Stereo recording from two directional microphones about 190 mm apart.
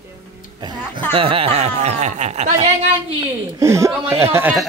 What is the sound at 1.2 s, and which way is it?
Speech, 30° right (ahead or behind).